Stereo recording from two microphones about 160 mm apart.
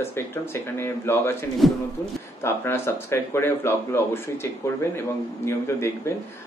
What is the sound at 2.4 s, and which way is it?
Speech, 15° left (ahead or behind).